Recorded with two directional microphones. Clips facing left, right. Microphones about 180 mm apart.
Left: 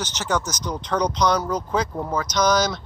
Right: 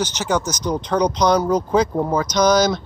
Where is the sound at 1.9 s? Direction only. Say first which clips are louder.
Right 6 dB; 25° right (ahead or behind).